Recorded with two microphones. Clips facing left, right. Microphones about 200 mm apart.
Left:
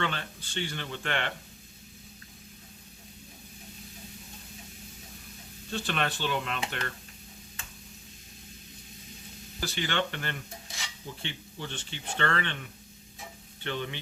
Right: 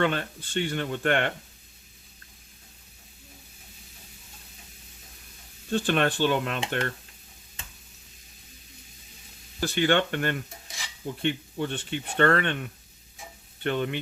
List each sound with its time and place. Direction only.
0.0 s speech: 50° right (ahead or behind)
5.7 s speech: 50° right (ahead or behind)
9.6 s speech: 55° right (ahead or behind)
13.7 s speech: 50° right (ahead or behind)